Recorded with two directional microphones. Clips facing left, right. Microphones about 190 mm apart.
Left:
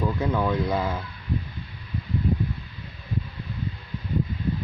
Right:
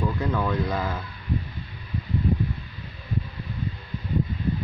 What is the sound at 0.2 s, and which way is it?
Speech, 10° left (ahead or behind).